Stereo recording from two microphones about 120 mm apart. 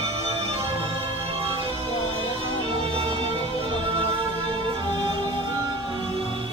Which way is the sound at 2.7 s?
50° right (ahead or behind).